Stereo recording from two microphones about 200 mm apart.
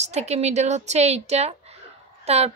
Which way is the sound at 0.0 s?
35° right (ahead or behind).